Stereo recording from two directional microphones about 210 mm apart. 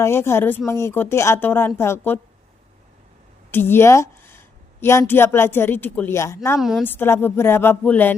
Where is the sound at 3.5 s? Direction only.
10° left (ahead or behind).